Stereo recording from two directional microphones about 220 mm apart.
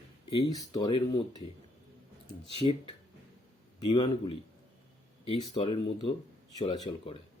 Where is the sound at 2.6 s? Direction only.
25° left (ahead or behind).